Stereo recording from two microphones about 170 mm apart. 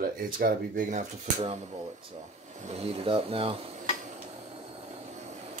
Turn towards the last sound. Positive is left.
turn(degrees=-40)  # may be behind; listen again after turning